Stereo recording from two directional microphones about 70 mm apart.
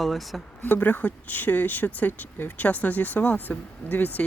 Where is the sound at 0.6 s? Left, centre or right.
Left.